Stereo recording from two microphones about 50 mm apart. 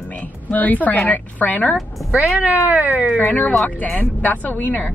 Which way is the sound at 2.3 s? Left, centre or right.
Right.